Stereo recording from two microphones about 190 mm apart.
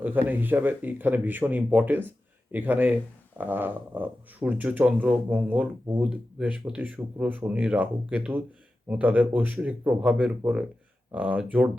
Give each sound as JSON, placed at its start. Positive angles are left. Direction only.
{"t": 0.0, "sound": "speech", "side_deg": -10}